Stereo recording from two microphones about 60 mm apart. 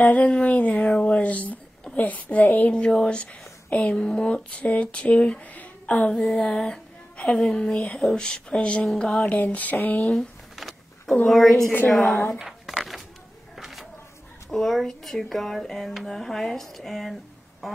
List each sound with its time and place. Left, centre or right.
0.0 s a woman's voice: left
8.1 s speech: centre
9.2 s a woman's voice: left
10.1 s a sound: centre
11.2 s speech: centre
12.4 s a sound: centre
14.5 s speech: centre